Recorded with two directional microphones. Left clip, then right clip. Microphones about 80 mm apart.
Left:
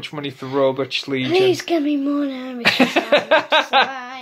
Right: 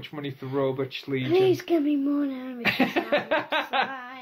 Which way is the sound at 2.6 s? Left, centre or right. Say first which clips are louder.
Left 8 dB; left.